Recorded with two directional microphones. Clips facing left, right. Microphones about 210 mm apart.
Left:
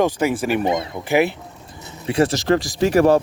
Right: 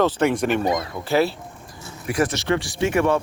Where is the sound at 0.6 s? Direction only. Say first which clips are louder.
Left 2 dB; 25° left (ahead or behind).